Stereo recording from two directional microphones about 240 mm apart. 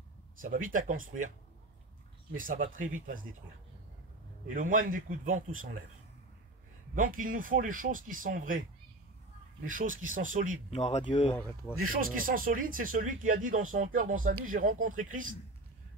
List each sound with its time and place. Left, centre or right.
0.4 s speech: right
2.3 s speech: right
4.6 s speech: right
7.0 s speech: right
9.7 s speech: right
10.7 s speech: left
11.8 s speech: right